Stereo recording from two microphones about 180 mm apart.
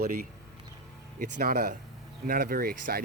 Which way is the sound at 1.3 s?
60° right (ahead or behind).